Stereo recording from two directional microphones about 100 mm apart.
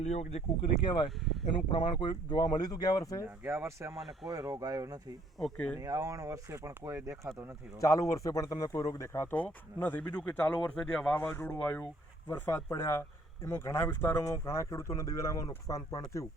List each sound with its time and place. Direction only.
0.1 s speech: 90° left
1.5 s speech: 50° left (ahead or behind)
3.2 s speech: 20° right (ahead or behind)
3.9 s speech: centre (ahead or behind)
4.3 s speech: 35° right (ahead or behind)
7.8 s speech: 35° left (ahead or behind)
9.8 s speech: 15° left (ahead or behind)
11.3 s speech: 20° left (ahead or behind)